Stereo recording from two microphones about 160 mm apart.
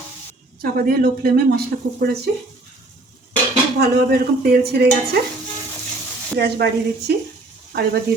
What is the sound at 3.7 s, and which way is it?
Speech, 80° right.